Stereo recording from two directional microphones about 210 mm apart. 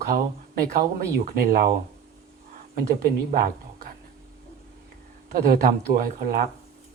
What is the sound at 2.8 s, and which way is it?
Speech, 45° right (ahead or behind).